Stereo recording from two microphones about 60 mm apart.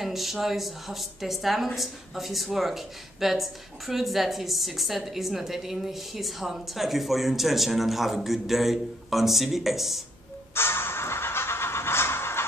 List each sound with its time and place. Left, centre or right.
0.0 s speech: centre
10.5 s music: left